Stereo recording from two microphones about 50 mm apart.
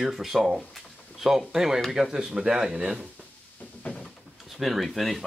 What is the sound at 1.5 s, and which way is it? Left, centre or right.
Speech, centre.